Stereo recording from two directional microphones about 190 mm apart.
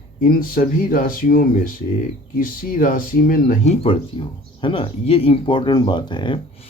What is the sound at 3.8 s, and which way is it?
Speech, 30° left (ahead or behind).